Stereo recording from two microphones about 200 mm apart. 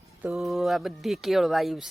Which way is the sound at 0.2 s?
Centre (ahead or behind).